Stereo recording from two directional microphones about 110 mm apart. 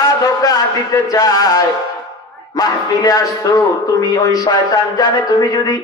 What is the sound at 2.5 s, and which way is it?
A man's voice, 35° left (ahead or behind).